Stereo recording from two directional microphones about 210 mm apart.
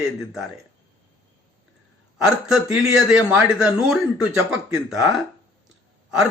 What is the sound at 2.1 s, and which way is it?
Speech, centre (ahead or behind).